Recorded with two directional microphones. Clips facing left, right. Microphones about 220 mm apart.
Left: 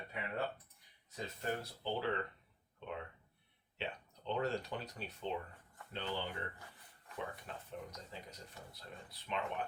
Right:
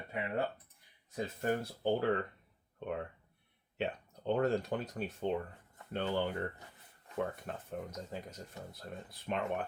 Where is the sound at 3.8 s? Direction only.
50° right (ahead or behind).